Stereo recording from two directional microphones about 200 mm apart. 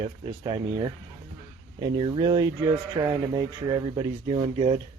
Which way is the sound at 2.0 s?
25° right (ahead or behind).